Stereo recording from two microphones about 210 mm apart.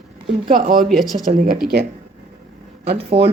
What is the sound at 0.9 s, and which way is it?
Speech, centre (ahead or behind).